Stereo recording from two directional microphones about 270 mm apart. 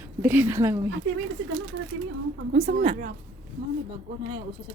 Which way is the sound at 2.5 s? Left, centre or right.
Right.